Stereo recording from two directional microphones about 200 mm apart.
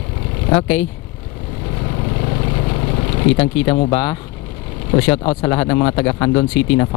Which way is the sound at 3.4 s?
10° left (ahead or behind).